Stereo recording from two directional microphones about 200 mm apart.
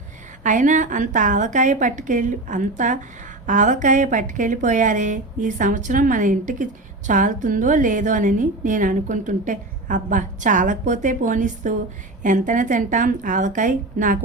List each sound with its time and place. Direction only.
0.4 s a woman's voice: 40° right (ahead or behind)